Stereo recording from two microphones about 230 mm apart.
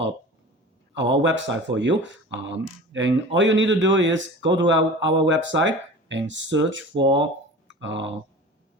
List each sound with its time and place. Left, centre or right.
0.9 s speech: right